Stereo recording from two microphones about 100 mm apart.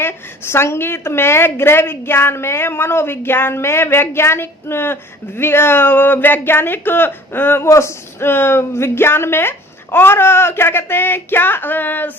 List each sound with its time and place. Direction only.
0.0 s a woman's voice: 25° left (ahead or behind)